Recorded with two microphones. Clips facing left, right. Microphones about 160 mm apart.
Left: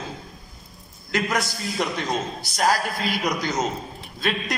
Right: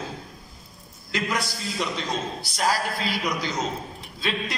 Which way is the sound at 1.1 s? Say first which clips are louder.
Left 3 dB; 50° left (ahead or behind).